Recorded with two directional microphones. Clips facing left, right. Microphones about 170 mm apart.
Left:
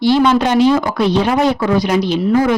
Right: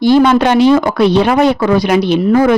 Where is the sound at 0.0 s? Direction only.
50° right (ahead or behind).